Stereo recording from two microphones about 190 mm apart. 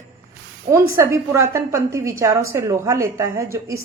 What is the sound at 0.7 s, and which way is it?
A woman's voice, 15° right (ahead or behind).